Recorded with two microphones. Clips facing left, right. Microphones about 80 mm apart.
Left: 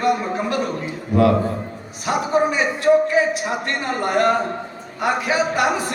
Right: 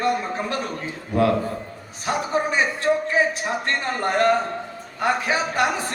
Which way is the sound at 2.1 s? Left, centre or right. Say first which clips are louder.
Left 4 dB; right.